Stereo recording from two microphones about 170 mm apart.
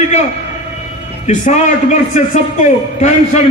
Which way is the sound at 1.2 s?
45° left (ahead or behind).